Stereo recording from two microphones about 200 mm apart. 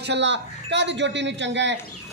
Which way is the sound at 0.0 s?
60° right (ahead or behind).